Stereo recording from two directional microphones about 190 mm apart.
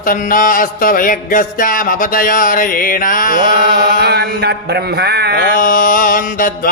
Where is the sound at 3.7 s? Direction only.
60° right (ahead or behind).